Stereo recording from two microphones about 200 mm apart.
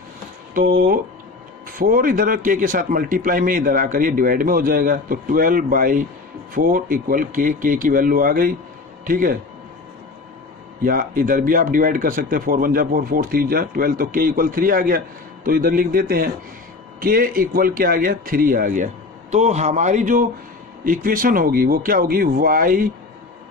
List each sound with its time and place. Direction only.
0.6 s speech: 45° right (ahead or behind)
10.8 s a man's voice: 45° right (ahead or behind)